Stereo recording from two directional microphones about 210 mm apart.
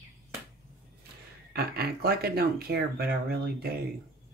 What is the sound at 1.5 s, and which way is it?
Speech, 45° right (ahead or behind).